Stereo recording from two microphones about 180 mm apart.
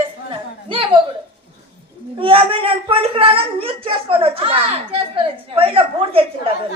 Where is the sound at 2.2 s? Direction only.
30° right (ahead or behind).